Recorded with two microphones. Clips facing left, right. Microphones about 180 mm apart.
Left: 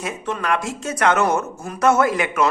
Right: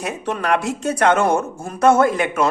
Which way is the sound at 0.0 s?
60° right (ahead or behind).